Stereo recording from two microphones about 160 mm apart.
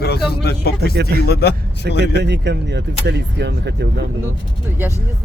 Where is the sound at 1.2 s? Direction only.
90° left.